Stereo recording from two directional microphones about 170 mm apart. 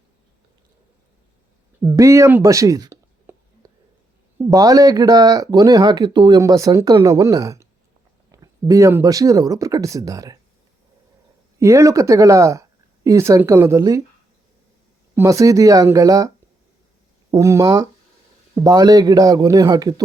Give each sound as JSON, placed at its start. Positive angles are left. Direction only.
{"t": 1.8, "sound": "a sound", "side_deg": -20}
{"t": 4.4, "sound": "speech", "side_deg": -20}
{"t": 11.6, "sound": "speech", "side_deg": -15}
{"t": 15.1, "sound": "speech", "side_deg": -15}
{"t": 17.3, "sound": "speech", "side_deg": -20}